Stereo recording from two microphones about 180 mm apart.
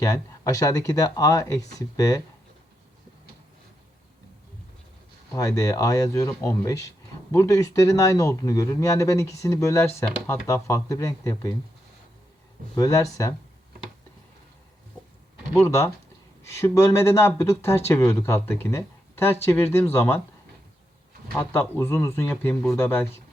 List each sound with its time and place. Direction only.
0.0 s speech: 20° left (ahead or behind)
5.3 s a man's voice: 20° left (ahead or behind)
12.7 s speech: 20° left (ahead or behind)
15.6 s a man's voice: 15° left (ahead or behind)
21.3 s a man's voice: 15° left (ahead or behind)